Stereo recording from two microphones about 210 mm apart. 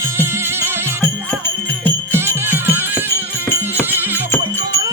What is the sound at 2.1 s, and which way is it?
Music, 10° right (ahead or behind).